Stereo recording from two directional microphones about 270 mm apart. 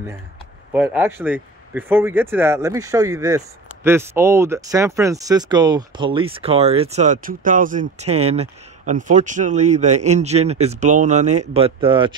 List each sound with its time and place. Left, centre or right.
0.7 s speech: centre